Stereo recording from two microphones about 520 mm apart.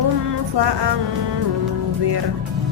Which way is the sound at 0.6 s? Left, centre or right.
Right.